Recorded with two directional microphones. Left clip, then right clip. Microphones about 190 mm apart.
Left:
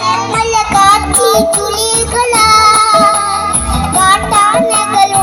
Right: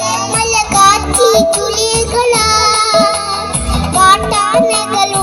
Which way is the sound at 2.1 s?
20° right (ahead or behind).